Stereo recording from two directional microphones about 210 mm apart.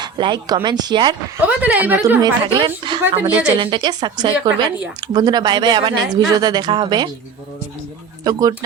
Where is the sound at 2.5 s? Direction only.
20° right (ahead or behind).